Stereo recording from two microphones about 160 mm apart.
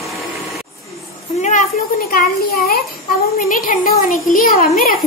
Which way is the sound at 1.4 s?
50° left (ahead or behind).